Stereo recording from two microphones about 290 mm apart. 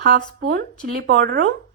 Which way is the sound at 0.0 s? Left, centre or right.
Right.